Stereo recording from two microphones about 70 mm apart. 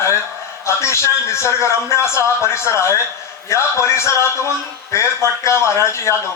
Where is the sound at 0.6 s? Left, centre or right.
Left.